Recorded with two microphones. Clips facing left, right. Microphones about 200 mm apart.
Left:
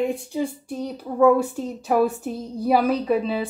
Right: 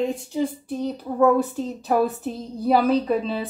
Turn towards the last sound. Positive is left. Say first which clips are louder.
# even
turn(degrees=10)  # may be behind; listen again after turning